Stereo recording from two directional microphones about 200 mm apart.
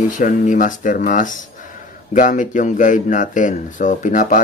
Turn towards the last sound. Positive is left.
turn(degrees=40)  # may be behind; listen again after turning